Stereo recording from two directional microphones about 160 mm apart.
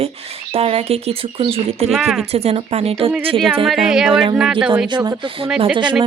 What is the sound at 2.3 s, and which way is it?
Speech, 40° right (ahead or behind).